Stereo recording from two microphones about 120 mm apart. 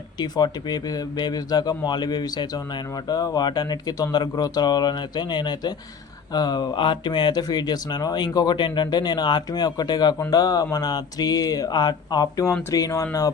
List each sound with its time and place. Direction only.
0.2 s speech: 35° left (ahead or behind)